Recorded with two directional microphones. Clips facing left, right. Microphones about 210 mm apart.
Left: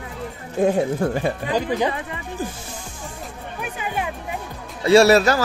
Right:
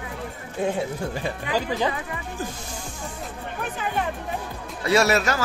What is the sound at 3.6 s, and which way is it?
Music, 10° left (ahead or behind).